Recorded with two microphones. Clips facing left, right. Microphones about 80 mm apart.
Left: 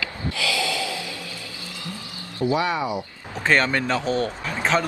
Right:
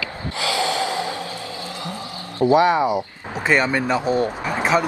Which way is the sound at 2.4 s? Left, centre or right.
Right.